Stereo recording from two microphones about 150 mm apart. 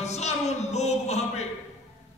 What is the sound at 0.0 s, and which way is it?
Music, 50° left (ahead or behind).